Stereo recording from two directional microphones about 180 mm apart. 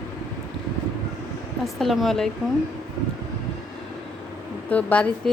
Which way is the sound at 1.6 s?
Centre (ahead or behind).